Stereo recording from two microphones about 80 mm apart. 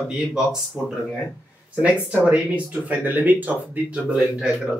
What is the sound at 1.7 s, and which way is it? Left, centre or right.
Speech, centre.